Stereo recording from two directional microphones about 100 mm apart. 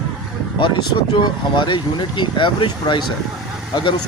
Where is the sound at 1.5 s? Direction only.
50° left (ahead or behind).